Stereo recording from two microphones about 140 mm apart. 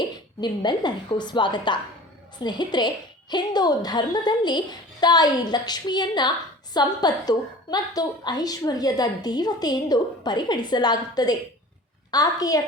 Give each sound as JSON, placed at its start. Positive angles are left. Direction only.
{"t": 0.4, "sound": "a woman's voice", "side_deg": 30}